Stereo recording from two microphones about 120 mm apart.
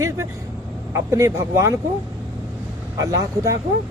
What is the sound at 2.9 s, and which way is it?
Speech, 30° right (ahead or behind).